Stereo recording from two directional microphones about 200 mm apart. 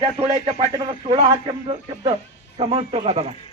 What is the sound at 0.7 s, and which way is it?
A man's voice, 20° right (ahead or behind).